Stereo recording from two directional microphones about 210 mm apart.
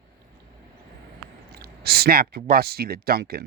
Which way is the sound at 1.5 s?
50° right (ahead or behind).